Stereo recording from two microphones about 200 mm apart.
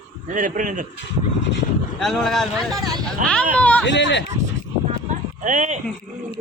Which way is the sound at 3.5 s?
5° left (ahead or behind).